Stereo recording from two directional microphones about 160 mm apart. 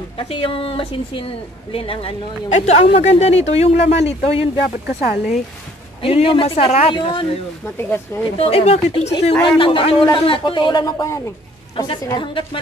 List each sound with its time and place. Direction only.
0.2 s a woman's voice: 35° left (ahead or behind)
6.0 s a woman's voice: 35° left (ahead or behind)
7.6 s speech: 15° left (ahead or behind)
8.4 s a woman's voice: 40° left (ahead or behind)